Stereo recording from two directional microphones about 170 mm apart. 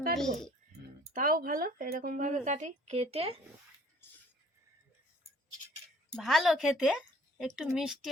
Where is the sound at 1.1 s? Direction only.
55° right (ahead or behind); by 3.3 s 35° right (ahead or behind).